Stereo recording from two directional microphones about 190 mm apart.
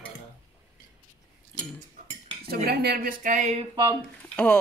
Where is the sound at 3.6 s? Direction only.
20° right (ahead or behind).